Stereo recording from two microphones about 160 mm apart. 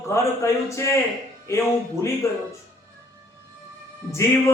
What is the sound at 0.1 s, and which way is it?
Speech, 20° left (ahead or behind).